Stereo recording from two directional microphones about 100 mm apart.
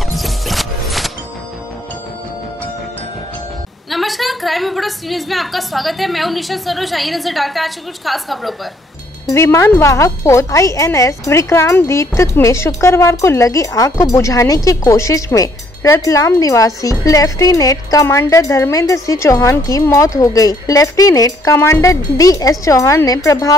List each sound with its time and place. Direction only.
0.1 s music: centre (ahead or behind)
3.9 s a woman's voice: centre (ahead or behind)
9.3 s speech: 30° left (ahead or behind)